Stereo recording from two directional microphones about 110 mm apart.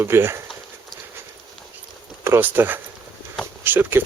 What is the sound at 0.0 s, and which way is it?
Speech, 20° right (ahead or behind).